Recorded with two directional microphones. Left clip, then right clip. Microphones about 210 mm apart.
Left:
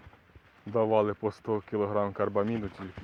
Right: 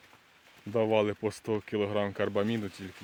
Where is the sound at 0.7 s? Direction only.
25° right (ahead or behind).